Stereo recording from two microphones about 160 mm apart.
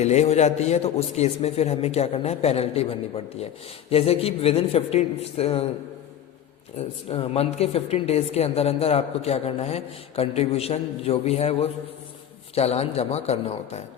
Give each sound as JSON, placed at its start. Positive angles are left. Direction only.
{"t": 0.0, "sound": "a woman's voice", "side_deg": 45}
{"t": 6.7, "sound": "a woman's voice", "side_deg": 40}